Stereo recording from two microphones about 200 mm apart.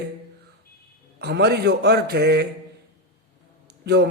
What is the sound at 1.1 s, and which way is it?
A man's voice, 55° right (ahead or behind).